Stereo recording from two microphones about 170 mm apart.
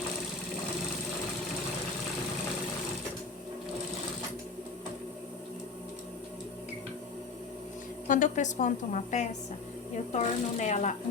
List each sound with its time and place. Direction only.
8.0 s a woman's voice: 50° left (ahead or behind)